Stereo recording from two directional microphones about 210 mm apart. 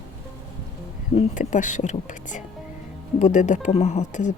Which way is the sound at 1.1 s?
35° left (ahead or behind).